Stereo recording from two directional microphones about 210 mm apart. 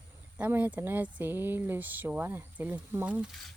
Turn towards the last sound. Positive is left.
turn(degrees=-10)  # may be behind; listen again after turning